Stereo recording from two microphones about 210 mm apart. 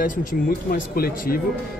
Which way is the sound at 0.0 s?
40° left (ahead or behind).